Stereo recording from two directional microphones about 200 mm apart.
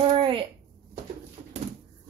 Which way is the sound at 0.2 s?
25° right (ahead or behind).